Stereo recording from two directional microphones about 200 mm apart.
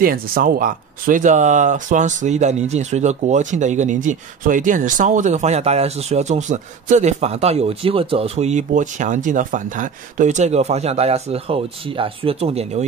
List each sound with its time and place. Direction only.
0.0 s speech: 45° right (ahead or behind); by 12.8 s 30° right (ahead or behind)